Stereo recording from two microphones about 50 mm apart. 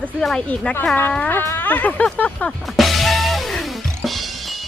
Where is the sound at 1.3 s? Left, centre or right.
Left.